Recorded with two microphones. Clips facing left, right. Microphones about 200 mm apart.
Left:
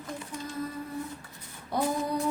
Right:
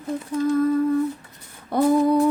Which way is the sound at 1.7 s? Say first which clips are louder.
Right 9 dB; 55° right (ahead or behind).